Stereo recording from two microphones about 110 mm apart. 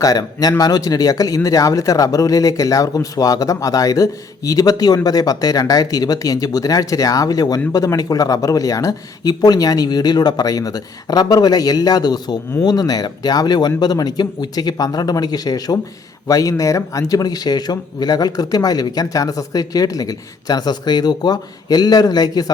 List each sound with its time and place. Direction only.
0.0 s a man's voice: 35° left (ahead or behind)